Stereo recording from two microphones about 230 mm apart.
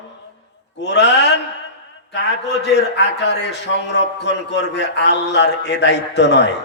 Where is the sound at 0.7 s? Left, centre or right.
Left.